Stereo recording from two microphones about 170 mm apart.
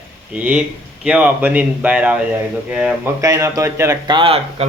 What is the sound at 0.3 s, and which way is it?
Speech, 10° right (ahead or behind).